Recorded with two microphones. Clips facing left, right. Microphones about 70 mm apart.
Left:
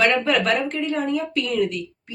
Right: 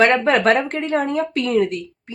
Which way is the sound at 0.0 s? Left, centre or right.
Right.